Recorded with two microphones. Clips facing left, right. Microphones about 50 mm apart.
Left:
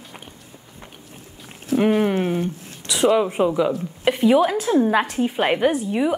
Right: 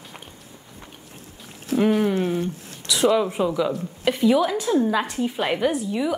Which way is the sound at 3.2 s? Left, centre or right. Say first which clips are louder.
Left 3 dB; left.